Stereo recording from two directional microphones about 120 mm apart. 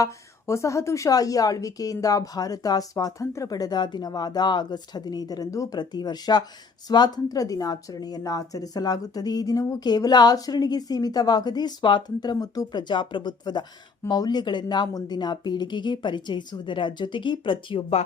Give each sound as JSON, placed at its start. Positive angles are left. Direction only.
{"t": 0.0, "sound": "a woman's voice", "side_deg": 25}